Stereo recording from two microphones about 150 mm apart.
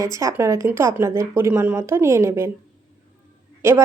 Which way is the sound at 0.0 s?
20° right (ahead or behind).